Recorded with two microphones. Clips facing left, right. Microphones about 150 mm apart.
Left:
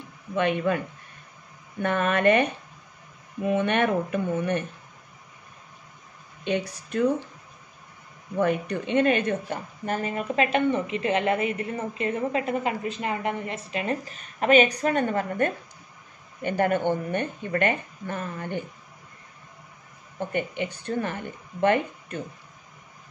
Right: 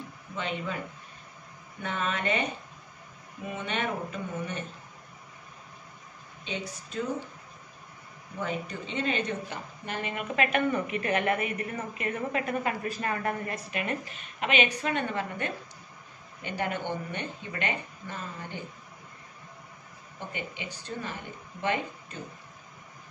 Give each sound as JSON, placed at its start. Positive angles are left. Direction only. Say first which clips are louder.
{"t": 0.4, "sound": "speech", "louder": "left 10 dB", "side_deg": 60}
{"t": 1.8, "sound": "speech", "louder": "left 8 dB", "side_deg": 60}
{"t": 6.4, "sound": "speech", "louder": "left 9 dB", "side_deg": 60}
{"t": 8.4, "sound": "a woman's voice", "louder": "left 9 dB", "side_deg": 60}
{"t": 20.3, "sound": "speech", "louder": "left 11 dB", "side_deg": 55}